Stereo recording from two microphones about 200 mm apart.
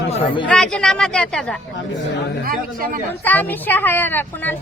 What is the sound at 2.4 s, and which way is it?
Speech, 45° right (ahead or behind).